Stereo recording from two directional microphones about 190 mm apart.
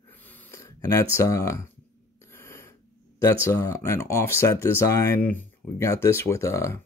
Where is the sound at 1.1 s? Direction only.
15° left (ahead or behind).